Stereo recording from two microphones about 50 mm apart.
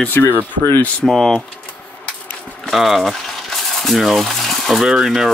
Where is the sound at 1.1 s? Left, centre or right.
Centre.